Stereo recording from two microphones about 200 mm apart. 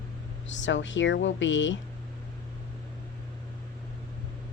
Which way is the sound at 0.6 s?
65° left (ahead or behind).